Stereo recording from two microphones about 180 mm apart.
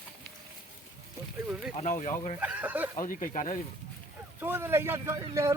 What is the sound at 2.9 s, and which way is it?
Speech, 45° left (ahead or behind).